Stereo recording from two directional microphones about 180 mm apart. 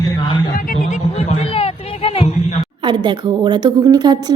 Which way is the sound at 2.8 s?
25° right (ahead or behind).